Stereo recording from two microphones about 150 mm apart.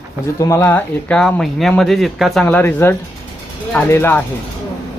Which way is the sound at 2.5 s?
15° left (ahead or behind).